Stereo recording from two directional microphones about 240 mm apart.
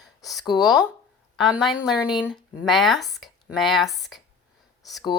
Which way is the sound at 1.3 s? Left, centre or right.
Centre.